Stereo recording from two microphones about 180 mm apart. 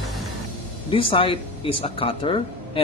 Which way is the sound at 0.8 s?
30° left (ahead or behind).